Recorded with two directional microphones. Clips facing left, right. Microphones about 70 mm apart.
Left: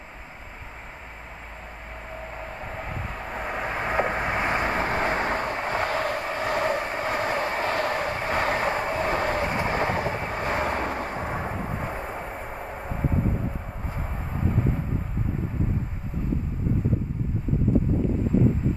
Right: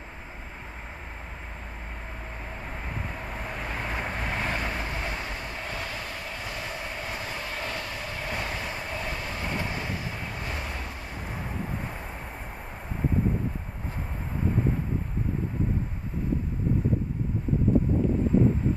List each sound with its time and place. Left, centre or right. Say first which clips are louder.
3.5 s vehicle: left 9 dB; left